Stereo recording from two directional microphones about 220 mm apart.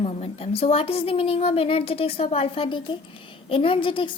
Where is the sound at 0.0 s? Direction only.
25° left (ahead or behind).